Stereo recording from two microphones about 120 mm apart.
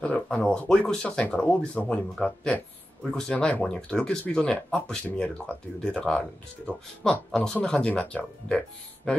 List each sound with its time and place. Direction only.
0.0 s speech: 10° left (ahead or behind)